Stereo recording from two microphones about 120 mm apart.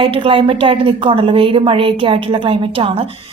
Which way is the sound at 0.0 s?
50° right (ahead or behind).